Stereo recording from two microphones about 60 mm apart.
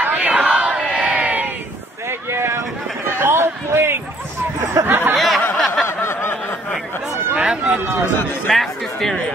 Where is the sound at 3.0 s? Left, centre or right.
Right.